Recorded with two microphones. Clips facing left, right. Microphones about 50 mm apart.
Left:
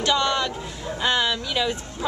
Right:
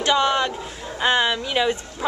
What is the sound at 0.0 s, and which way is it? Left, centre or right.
A woman's voice, centre.